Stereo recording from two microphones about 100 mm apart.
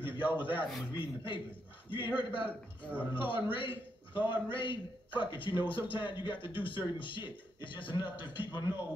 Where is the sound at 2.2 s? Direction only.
60° left (ahead or behind).